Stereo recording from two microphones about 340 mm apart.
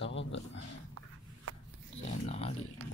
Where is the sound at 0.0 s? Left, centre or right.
Left.